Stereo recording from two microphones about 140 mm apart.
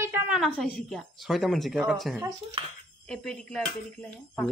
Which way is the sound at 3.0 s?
5° left (ahead or behind).